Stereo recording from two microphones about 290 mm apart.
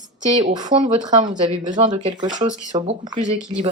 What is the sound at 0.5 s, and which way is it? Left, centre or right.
A woman's voice, centre.